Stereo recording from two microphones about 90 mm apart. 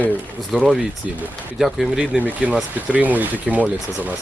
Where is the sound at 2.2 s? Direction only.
15° right (ahead or behind).